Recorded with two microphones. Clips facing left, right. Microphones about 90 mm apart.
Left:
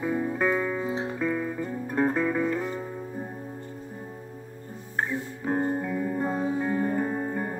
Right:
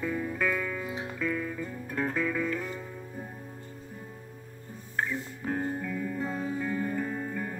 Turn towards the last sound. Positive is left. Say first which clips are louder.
# left 5 dB
turn(degrees=30)  # may be behind; listen again after turning